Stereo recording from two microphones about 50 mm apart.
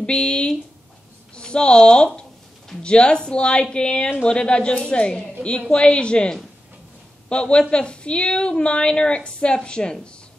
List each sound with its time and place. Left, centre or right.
0.0 s a woman's voice: left